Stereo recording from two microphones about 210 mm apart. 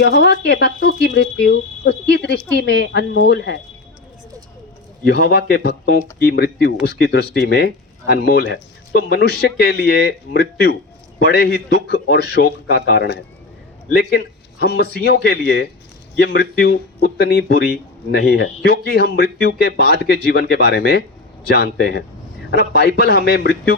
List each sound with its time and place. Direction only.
0.0 s speech: 50° left (ahead or behind)
5.0 s speech: 55° left (ahead or behind)